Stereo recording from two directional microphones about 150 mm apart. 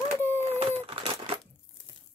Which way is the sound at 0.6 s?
40° right (ahead or behind).